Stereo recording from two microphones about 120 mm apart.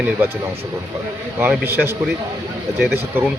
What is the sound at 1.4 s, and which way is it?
Speech, 15° right (ahead or behind).